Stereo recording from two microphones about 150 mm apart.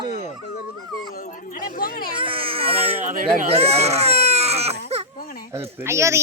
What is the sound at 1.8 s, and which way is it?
Speech, 70° left (ahead or behind).